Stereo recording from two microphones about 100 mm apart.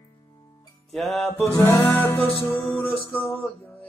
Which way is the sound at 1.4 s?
25° left (ahead or behind).